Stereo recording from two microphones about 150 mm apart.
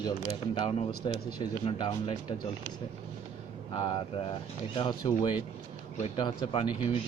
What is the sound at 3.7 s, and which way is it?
Speech, 35° left (ahead or behind).